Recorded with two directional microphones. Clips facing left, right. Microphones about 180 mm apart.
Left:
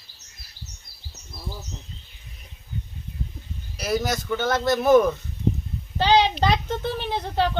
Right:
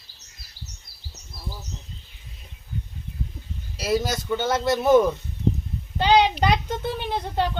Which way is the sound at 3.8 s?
25° right (ahead or behind).